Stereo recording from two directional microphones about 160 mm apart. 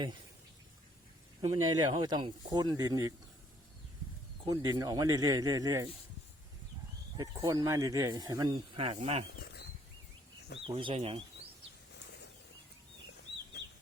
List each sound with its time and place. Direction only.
1.4 s speech: 25° right (ahead or behind)
4.4 s speech: 25° right (ahead or behind)
7.2 s speech: 20° right (ahead or behind)
9.4 s a sound: 90° left
10.8 s speech: 35° right (ahead or behind)